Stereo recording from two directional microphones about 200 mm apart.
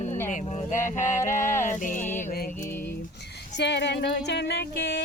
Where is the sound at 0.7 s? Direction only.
40° left (ahead or behind).